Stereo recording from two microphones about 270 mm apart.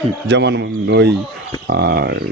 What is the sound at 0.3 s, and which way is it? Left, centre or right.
Speech, right.